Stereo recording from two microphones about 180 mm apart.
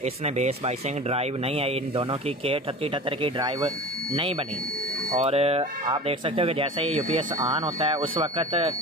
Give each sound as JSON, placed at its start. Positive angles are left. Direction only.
{"t": 0.0, "sound": "speech", "side_deg": -35}